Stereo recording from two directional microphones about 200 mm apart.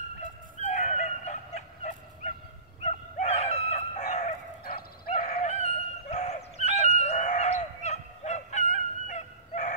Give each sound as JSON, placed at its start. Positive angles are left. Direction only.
{"t": 0.6, "sound": "fowl", "side_deg": 35}
{"t": 2.8, "sound": "chicken", "side_deg": 35}
{"t": 4.7, "sound": "fowl", "side_deg": 35}